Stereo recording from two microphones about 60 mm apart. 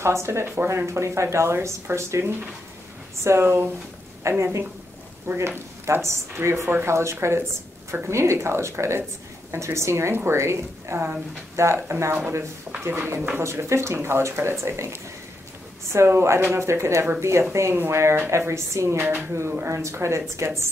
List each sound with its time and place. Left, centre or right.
0.0 s a woman's voice: right
13.4 s a woman's voice: right
15.9 s a woman's voice: right